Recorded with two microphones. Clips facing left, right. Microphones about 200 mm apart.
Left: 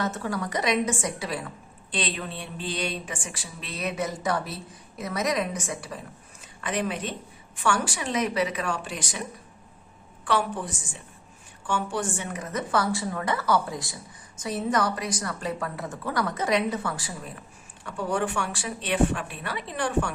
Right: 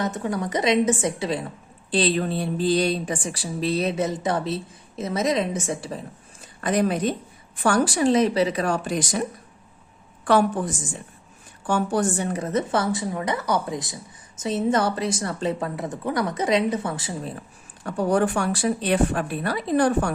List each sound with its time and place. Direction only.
0.0 s a woman's voice: 20° right (ahead or behind)
1.9 s speech: 35° right (ahead or behind)
6.4 s speech: 40° right (ahead or behind)
10.2 s a woman's voice: 45° right (ahead or behind); by 17.2 s 20° right (ahead or behind)
17.8 s speech: 40° right (ahead or behind)